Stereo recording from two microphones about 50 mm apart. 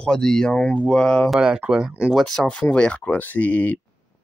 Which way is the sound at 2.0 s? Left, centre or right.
Centre.